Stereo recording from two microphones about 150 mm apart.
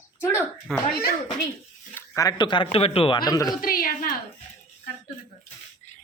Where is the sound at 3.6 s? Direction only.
75° left (ahead or behind).